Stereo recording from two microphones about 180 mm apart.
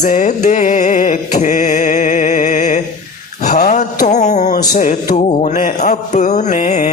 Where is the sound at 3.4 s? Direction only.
45° left (ahead or behind).